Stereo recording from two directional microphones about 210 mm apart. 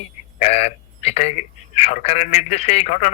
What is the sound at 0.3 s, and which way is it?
A man's voice, 30° left (ahead or behind).